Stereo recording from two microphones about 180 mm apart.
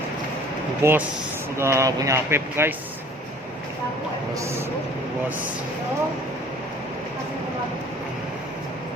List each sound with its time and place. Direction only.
0.8 s speech: 10° right (ahead or behind)
4.4 s speech: 15° right (ahead or behind)